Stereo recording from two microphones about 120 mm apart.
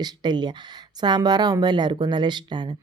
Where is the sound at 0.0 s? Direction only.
40° right (ahead or behind).